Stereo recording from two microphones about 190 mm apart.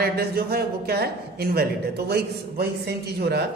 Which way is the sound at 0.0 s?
55° right (ahead or behind).